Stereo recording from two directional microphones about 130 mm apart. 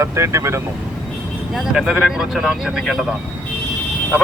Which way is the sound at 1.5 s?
Centre (ahead or behind).